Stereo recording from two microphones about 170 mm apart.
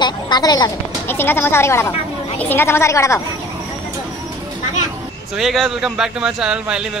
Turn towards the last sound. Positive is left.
turn(degrees=-5)  # may be behind; listen again after turning